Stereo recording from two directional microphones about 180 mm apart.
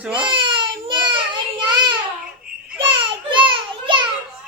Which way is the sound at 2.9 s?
25° right (ahead or behind).